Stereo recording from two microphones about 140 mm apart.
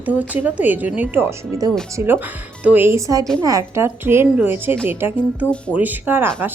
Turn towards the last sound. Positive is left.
turn(degrees=-15)  # may be behind; listen again after turning